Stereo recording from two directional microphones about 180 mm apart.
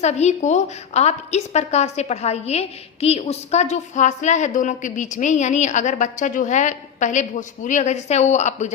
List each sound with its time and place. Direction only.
0.0 s a woman's voice: 40° left (ahead or behind)